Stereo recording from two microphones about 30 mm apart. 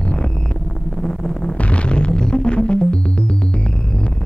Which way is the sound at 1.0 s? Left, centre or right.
Centre.